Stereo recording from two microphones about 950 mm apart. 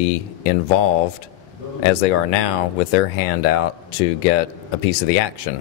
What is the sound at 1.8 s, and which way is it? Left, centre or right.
Speech, left.